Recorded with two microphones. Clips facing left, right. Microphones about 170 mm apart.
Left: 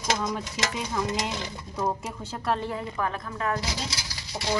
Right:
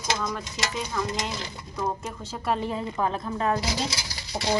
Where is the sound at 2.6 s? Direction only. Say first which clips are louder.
Right 2 dB; 20° right (ahead or behind).